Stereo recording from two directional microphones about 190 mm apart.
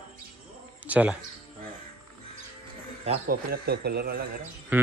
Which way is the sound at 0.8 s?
10° right (ahead or behind).